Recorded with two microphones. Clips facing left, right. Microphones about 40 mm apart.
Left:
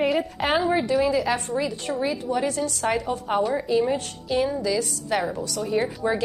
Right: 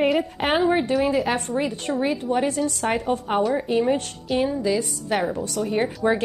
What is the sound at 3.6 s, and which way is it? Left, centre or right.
Speech, right.